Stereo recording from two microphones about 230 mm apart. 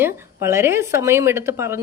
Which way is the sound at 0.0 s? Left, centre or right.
Centre.